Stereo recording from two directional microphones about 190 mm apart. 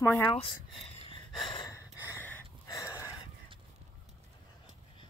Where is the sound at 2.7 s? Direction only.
15° left (ahead or behind).